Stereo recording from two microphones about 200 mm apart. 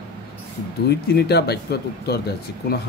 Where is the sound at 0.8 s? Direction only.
55° left (ahead or behind).